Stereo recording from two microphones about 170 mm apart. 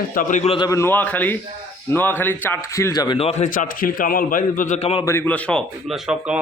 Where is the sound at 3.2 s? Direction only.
40° left (ahead or behind).